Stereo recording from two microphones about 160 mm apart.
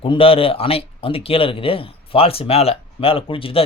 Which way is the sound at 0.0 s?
35° left (ahead or behind).